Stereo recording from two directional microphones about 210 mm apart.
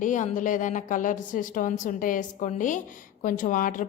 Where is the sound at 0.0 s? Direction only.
35° left (ahead or behind).